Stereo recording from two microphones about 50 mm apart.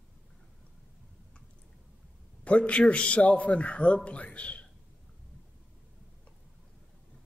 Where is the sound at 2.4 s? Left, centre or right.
Left.